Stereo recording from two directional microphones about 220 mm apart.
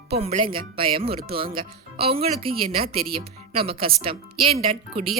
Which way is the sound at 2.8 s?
45° right (ahead or behind).